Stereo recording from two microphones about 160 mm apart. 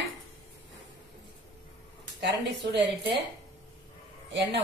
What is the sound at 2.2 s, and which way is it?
Speech, 90° right.